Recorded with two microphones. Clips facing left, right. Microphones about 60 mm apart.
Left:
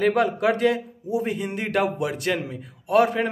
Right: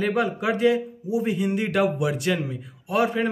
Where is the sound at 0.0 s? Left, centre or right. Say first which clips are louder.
Left 3 dB; left.